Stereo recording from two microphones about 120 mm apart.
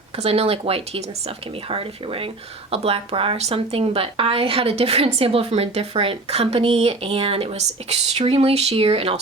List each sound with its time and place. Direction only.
0.2 s speech: 55° right (ahead or behind)